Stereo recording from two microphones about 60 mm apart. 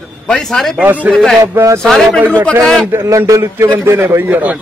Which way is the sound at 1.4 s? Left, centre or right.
Right.